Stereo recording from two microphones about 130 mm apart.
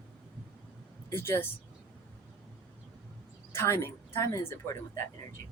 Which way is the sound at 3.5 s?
20° left (ahead or behind).